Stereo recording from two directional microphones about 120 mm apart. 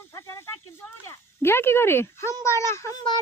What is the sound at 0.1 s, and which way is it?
A child's voice, 20° left (ahead or behind).